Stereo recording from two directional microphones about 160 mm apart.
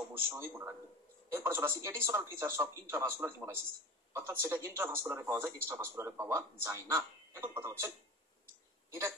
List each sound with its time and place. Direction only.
0.1 s a man's voice: 15° right (ahead or behind)